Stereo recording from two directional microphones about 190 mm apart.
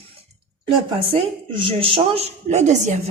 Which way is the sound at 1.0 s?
30° right (ahead or behind).